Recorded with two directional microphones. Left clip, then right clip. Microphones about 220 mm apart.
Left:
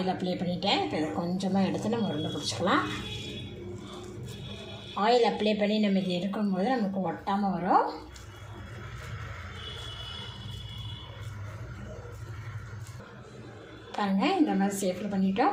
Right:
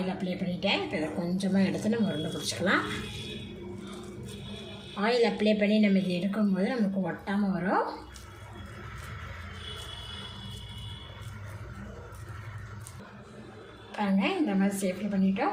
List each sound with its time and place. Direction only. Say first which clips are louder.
0.0 s a woman's voice: left 3 dB; centre (ahead or behind)
0.6 s a woman's voice: left 1 dB; 15° left (ahead or behind)
1.2 s a woman's voice: even; centre (ahead or behind)
4.9 s a woman's voice: left 2 dB; centre (ahead or behind)
13.9 s a woman's voice: left 2 dB; 20° left (ahead or behind)